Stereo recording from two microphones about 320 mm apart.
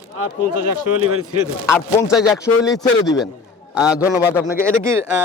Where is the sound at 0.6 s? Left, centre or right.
Right.